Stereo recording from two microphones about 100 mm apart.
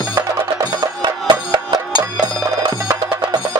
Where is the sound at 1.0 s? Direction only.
45° right (ahead or behind).